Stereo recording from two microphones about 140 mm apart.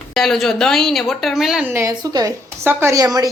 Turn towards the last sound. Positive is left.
turn(degrees=-25)  # may be behind; listen again after turning